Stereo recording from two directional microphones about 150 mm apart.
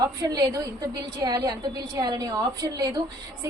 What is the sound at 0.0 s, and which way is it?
A woman's voice, 25° right (ahead or behind).